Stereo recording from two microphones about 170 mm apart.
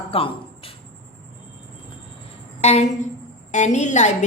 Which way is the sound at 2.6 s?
40° left (ahead or behind).